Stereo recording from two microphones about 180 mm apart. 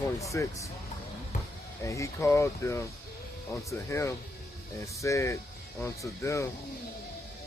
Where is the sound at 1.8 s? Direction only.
15° left (ahead or behind).